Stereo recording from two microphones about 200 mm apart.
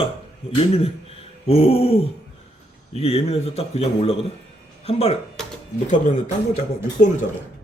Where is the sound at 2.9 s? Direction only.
30° left (ahead or behind).